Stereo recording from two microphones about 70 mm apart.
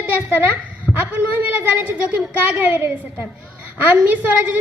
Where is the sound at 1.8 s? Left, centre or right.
Centre.